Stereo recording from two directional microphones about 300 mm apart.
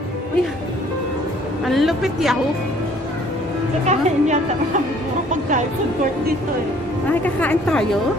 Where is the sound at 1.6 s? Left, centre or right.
Centre.